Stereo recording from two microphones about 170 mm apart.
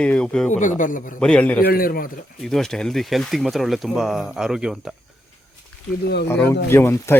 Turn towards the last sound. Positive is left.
turn(degrees=15)  # may be behind; listen again after turning